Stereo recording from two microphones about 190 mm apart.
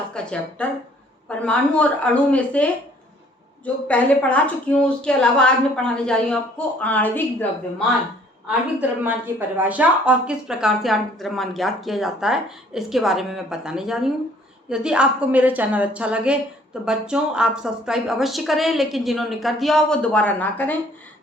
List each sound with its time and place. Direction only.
0.1 s a woman's voice: 5° left (ahead or behind)
3.8 s a woman's voice: 5° left (ahead or behind)
8.4 s a woman's voice: 10° right (ahead or behind); by 20.7 s 10° left (ahead or behind)